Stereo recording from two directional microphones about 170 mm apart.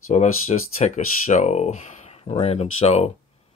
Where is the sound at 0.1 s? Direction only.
45° left (ahead or behind).